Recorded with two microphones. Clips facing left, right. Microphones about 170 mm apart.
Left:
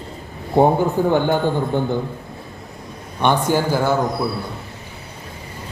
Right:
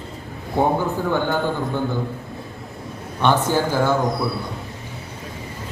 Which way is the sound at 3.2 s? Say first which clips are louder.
Left 1 dB; 15° left (ahead or behind).